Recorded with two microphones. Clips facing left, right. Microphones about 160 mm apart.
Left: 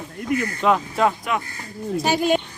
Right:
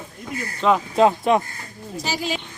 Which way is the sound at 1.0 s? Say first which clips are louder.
Right 5 dB; 25° right (ahead or behind).